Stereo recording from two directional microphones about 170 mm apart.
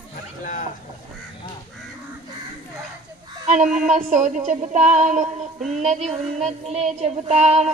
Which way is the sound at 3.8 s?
45° right (ahead or behind).